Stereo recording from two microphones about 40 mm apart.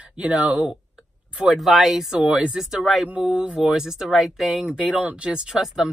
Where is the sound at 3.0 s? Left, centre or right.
Right.